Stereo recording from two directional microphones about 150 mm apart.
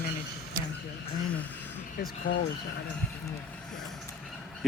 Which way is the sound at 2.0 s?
80° left.